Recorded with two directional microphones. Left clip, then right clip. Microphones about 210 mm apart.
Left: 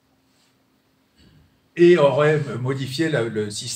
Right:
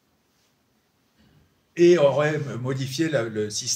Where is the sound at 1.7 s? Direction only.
50° right (ahead or behind).